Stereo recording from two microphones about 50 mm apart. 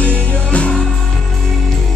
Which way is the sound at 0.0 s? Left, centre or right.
Left.